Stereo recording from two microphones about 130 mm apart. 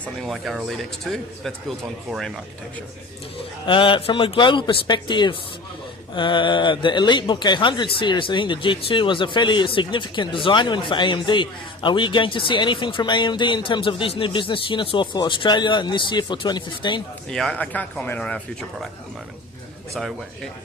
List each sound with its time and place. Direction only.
0.0 s speech: centre (ahead or behind)
3.7 s speech: 40° left (ahead or behind)
17.3 s speech: 5° left (ahead or behind)
20.0 s speech: centre (ahead or behind)